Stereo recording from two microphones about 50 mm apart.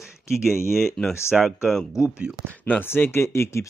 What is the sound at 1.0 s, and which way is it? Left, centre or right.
Speech, centre.